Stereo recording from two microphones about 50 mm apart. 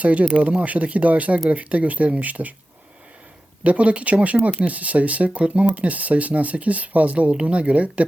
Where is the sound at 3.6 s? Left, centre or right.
Right.